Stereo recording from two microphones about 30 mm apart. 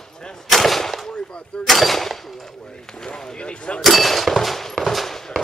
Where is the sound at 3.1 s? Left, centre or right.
Left.